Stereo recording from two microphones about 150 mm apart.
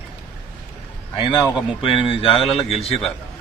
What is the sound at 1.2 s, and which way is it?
Speech, 30° left (ahead or behind).